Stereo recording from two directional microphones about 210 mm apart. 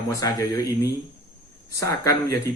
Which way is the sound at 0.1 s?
15° left (ahead or behind).